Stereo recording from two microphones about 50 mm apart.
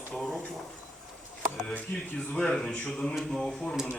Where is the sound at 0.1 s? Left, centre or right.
Centre.